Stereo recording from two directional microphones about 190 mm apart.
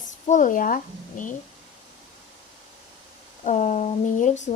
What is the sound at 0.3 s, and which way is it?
Speech, 45° left (ahead or behind).